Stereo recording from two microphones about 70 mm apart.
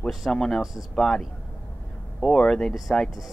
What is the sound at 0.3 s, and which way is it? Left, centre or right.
Speech, centre.